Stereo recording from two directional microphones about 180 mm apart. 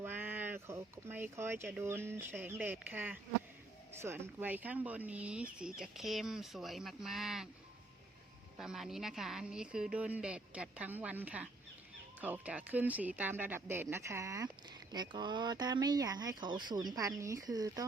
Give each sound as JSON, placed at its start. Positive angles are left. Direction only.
{"t": 0.0, "sound": "a sound", "side_deg": -10}
{"t": 1.8, "sound": "speech", "side_deg": -15}
{"t": 8.5, "sound": "speech", "side_deg": 0}